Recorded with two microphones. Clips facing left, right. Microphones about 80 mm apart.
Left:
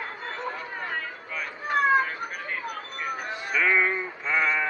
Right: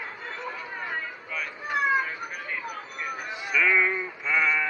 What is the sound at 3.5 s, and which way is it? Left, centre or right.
Music, left.